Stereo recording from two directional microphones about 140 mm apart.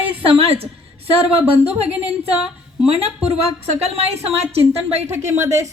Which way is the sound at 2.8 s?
45° right (ahead or behind).